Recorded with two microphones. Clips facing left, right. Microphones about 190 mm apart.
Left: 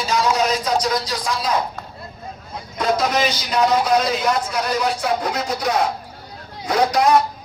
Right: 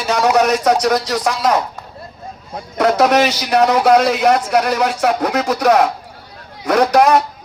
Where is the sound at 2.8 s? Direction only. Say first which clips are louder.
Right 7 dB; 75° right (ahead or behind).